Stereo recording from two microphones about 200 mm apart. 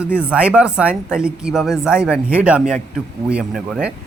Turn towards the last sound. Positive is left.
turn(degrees=-5)  # may be behind; listen again after turning